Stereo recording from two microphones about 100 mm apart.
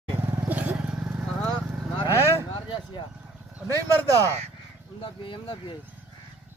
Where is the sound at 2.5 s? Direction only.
50° left (ahead or behind).